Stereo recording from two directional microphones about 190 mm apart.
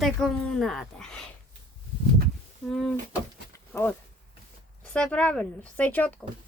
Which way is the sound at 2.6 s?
Centre (ahead or behind).